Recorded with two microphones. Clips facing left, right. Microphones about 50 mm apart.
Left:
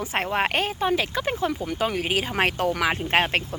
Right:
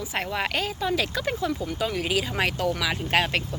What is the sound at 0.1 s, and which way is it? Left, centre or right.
Speech, left.